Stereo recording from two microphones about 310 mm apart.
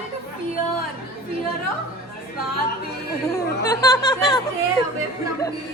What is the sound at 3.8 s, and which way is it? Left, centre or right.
Speech, centre.